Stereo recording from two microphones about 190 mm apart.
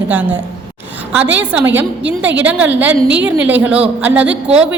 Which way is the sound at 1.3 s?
10° right (ahead or behind).